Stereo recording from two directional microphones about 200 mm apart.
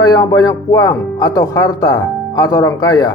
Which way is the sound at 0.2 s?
20° left (ahead or behind).